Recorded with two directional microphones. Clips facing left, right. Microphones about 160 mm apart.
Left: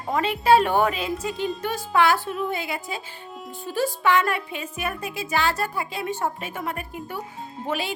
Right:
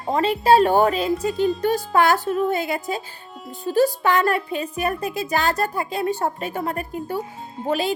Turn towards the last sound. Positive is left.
turn(degrees=-40)  # may be behind; listen again after turning